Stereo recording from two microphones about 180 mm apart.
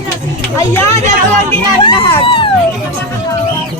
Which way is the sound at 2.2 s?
30° left (ahead or behind).